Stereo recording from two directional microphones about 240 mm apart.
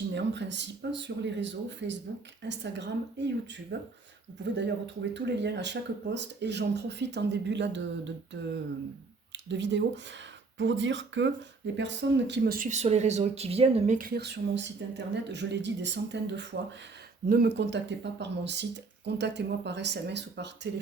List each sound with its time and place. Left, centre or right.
0.1 s speech: right
5.1 s speech: right